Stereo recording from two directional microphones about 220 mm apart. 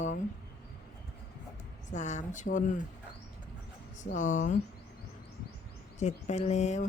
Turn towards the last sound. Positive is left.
turn(degrees=30)  # may be behind; listen again after turning